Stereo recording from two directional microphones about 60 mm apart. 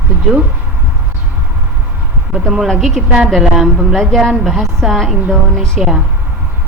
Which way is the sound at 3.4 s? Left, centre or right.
Centre.